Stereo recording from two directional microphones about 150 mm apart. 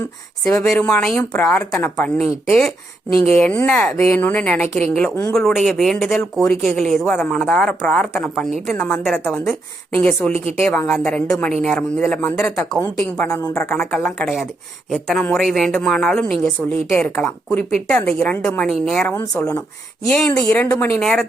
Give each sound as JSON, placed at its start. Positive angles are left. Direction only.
{"t": 0.6, "sound": "a woman's voice", "side_deg": 5}
{"t": 13.4, "sound": "speech", "side_deg": 20}
{"t": 13.7, "sound": "a woman's voice", "side_deg": 5}
{"t": 19.3, "sound": "a woman's voice", "side_deg": 15}